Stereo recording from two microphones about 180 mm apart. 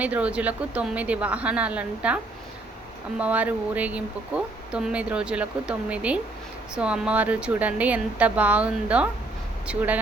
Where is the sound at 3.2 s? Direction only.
10° right (ahead or behind).